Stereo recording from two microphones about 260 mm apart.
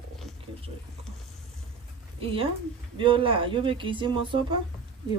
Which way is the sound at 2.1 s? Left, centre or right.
Right.